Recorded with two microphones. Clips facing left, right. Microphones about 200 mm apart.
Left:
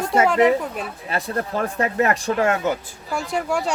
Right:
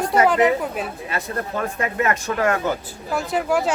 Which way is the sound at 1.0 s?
35° left (ahead or behind).